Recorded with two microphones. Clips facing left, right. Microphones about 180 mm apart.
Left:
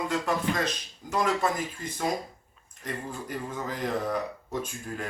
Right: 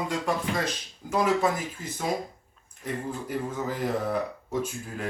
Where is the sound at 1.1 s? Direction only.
10° right (ahead or behind).